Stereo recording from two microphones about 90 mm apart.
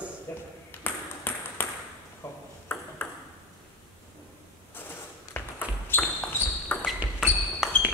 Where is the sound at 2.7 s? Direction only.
20° left (ahead or behind).